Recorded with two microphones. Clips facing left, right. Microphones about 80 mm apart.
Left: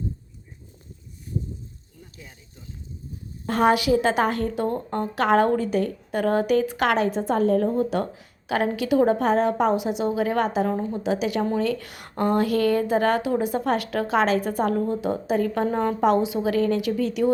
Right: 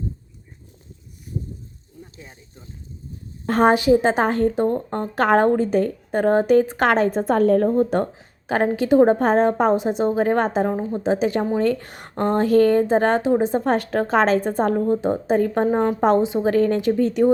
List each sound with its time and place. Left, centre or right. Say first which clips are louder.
2.1 s speech: right 3 dB; right
7.7 s a woman's voice: right 4 dB; right